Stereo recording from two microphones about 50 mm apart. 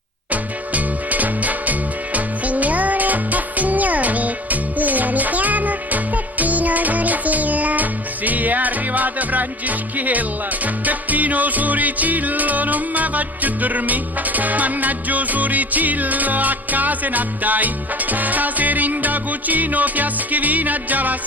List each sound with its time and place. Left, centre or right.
0.3 s music: right